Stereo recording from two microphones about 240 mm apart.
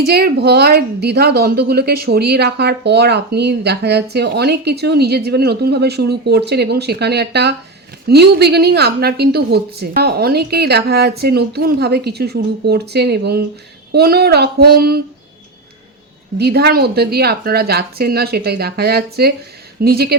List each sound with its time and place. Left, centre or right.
0.0 s a woman's voice: right
16.4 s a woman's voice: right